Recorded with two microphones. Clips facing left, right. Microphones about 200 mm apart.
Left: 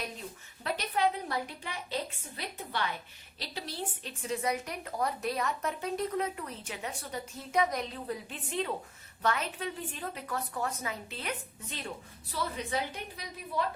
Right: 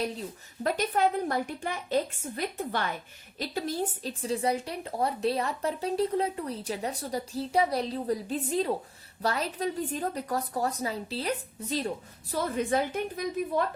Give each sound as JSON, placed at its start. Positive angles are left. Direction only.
{"t": 0.0, "sound": "a woman's voice", "side_deg": -40}
{"t": 12.3, "sound": "a woman's voice", "side_deg": -50}